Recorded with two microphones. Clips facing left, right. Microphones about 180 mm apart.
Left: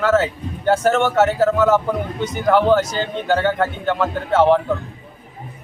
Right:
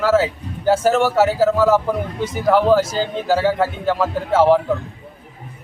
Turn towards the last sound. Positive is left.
turn(degrees=-5)  # may be behind; listen again after turning